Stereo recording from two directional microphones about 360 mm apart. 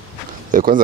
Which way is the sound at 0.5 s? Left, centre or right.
Right.